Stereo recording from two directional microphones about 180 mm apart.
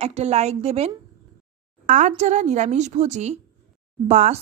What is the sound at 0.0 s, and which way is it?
A woman's voice, 35° right (ahead or behind).